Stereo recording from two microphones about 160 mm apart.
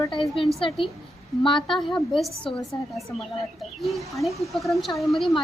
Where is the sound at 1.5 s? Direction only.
30° left (ahead or behind).